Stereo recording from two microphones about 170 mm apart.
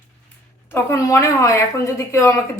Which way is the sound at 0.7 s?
15° left (ahead or behind).